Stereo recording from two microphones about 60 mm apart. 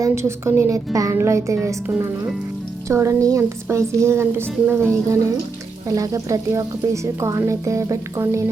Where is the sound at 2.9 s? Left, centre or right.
Right.